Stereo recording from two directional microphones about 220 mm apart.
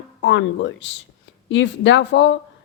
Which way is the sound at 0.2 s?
55° left (ahead or behind).